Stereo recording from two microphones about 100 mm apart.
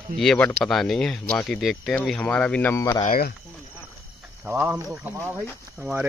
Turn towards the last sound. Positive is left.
turn(degrees=-15)  # may be behind; listen again after turning